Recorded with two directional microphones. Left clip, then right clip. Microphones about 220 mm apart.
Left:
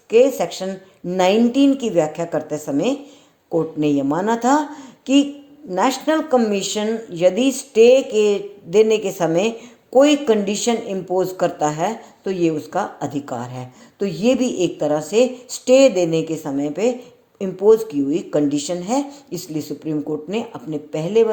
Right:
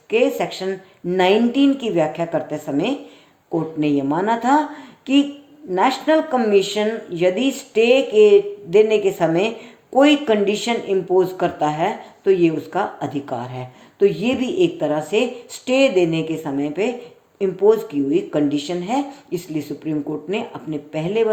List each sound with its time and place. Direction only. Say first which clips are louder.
0.1 s speech: left 3 dB; 30° left (ahead or behind)